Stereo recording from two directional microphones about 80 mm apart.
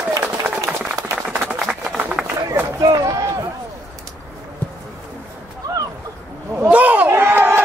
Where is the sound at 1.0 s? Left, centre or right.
Right.